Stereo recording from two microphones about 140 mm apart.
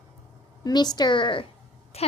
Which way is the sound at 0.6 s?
30° left (ahead or behind).